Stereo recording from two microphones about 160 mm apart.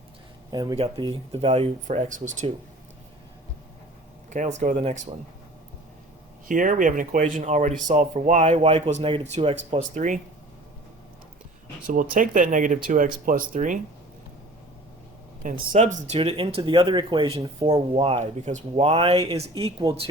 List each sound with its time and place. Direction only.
0.5 s speech: 25° right (ahead or behind)
1.3 s speech: 40° right (ahead or behind)
4.3 s speech: 50° right (ahead or behind)
6.5 s speech: 55° right (ahead or behind)
11.9 s speech: 55° right (ahead or behind)
15.7 s speech: 50° right (ahead or behind)